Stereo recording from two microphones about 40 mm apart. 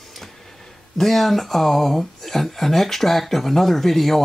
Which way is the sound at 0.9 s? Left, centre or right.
Centre.